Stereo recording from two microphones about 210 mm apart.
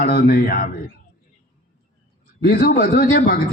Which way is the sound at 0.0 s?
45° left (ahead or behind).